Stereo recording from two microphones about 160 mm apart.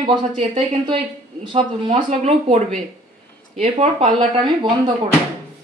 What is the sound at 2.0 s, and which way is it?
Speech, 45° right (ahead or behind).